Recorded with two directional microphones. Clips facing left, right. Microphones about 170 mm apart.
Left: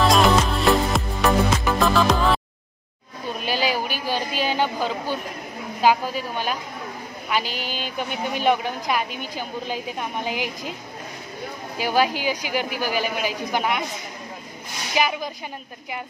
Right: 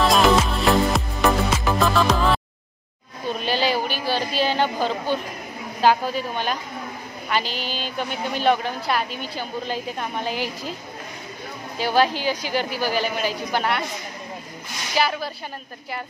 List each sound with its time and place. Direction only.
0.0 s music: centre (ahead or behind)
3.3 s a sound: 10° left (ahead or behind)
4.8 s a woman's voice: 10° left (ahead or behind)
11.8 s a woman's voice: 10° left (ahead or behind)
15.0 s a woman's voice: 15° left (ahead or behind)